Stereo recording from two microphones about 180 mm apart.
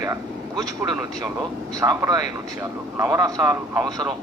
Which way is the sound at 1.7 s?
20° right (ahead or behind).